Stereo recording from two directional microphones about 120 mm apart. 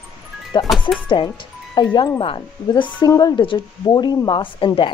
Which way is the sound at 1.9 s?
30° left (ahead or behind).